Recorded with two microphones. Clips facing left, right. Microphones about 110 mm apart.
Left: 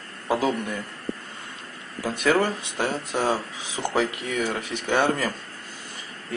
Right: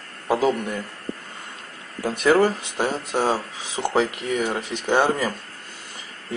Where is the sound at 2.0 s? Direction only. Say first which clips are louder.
Right 4 dB; 25° right (ahead or behind).